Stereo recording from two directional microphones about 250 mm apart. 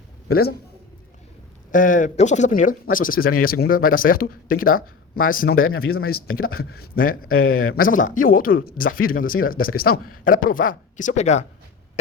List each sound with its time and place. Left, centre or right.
0.3 s a man's voice: left
1.7 s a man's voice: left